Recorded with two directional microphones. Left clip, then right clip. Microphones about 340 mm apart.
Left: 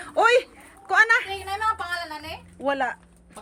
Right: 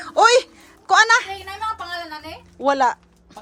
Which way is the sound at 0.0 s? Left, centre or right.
Centre.